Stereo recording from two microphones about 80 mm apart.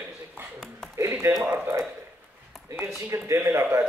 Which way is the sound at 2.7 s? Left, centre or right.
Right.